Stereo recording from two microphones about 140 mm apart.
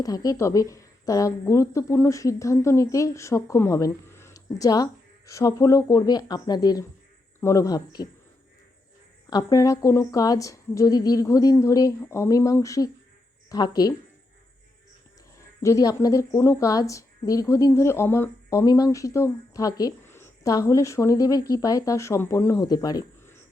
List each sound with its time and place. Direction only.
0.0 s a woman's voice: 25° left (ahead or behind)
9.3 s a woman's voice: 25° left (ahead or behind)
15.6 s a woman's voice: 25° left (ahead or behind)